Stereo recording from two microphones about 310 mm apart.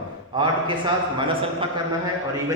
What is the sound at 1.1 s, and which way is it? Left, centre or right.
Speech, centre.